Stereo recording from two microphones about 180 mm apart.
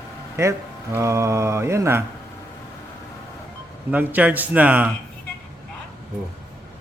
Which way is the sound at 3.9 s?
10° right (ahead or behind).